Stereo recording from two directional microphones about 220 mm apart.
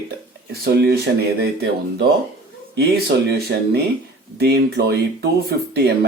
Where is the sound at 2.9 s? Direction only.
45° right (ahead or behind).